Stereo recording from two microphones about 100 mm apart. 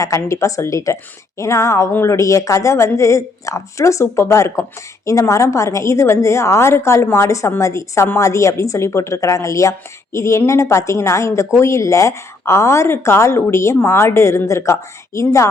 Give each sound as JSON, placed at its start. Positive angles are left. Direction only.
{"t": 0.0, "sound": "a woman's voice", "side_deg": 30}